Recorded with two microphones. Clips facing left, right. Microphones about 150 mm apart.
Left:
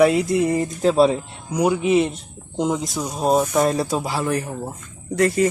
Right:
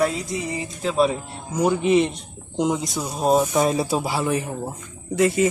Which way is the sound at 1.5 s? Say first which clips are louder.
Left 1 dB; 10° left (ahead or behind).